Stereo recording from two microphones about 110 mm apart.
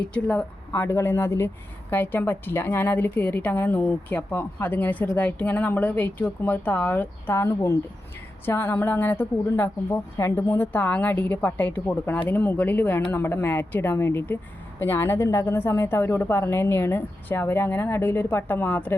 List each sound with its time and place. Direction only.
0.0 s a woman's voice: 10° left (ahead or behind)